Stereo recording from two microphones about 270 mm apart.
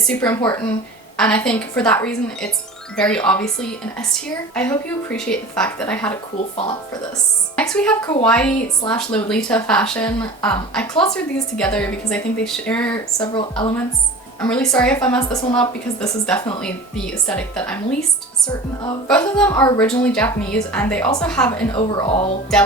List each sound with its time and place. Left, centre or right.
0.1 s speech: centre
7.5 s speech: centre
13.2 s a woman's voice: centre
14.4 s speech: centre
19.0 s speech: centre
21.7 s a woman's voice: centre
22.5 s speech: centre